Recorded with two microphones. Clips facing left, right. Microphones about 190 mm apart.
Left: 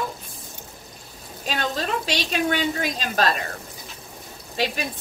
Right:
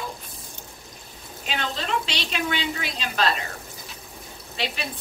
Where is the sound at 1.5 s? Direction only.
45° left (ahead or behind).